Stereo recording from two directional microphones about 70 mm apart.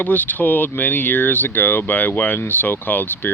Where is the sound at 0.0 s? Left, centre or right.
Left.